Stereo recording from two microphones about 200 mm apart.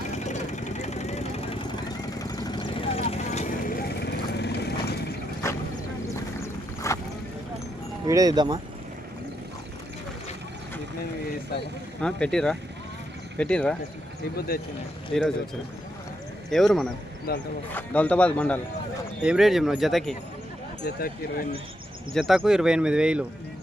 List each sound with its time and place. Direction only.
0.1 s vehicle: 35° left (ahead or behind); by 4.9 s 55° left (ahead or behind)
5.4 s vehicle: 15° left (ahead or behind)
6.4 s clip-clop: 15° left (ahead or behind)
8.0 s speech: 15° right (ahead or behind)
12.0 s speech: 5° left (ahead or behind)
14.3 s speech: 50° left (ahead or behind)
15.1 s speech: centre (ahead or behind)
16.5 s speech: centre (ahead or behind)
17.3 s speech: 50° left (ahead or behind)
17.7 s speech: 10° left (ahead or behind)
20.8 s speech: 50° left (ahead or behind)
22.1 s speech: centre (ahead or behind)